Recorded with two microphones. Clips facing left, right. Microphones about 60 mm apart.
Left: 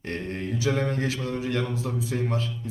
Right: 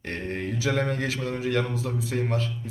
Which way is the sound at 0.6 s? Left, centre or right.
Right.